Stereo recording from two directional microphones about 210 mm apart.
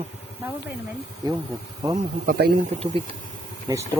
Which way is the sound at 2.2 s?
50° right (ahead or behind).